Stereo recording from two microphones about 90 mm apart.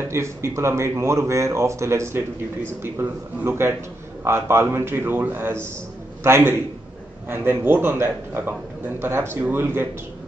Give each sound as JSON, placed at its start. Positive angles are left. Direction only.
{"t": 0.1, "sound": "a man's voice", "side_deg": -30}